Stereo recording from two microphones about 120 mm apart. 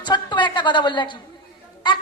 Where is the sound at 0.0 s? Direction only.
40° left (ahead or behind).